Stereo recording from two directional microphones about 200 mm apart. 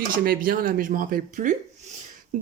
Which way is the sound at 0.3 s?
45° right (ahead or behind).